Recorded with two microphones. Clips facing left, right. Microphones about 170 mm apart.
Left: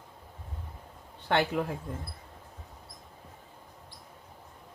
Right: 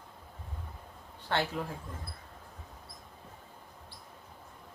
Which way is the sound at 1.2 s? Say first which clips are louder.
Left 5 dB; 65° left (ahead or behind).